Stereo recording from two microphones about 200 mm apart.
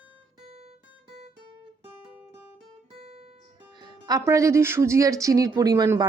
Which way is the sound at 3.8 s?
20° right (ahead or behind).